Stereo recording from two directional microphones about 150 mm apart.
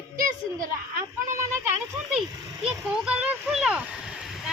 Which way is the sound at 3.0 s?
10° right (ahead or behind).